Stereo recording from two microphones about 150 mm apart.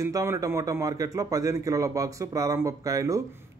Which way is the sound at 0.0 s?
20° right (ahead or behind).